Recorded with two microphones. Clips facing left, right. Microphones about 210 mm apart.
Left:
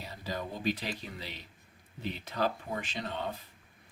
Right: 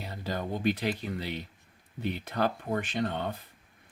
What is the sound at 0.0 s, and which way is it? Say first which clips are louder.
Speech: right 4 dB; 60° right (ahead or behind).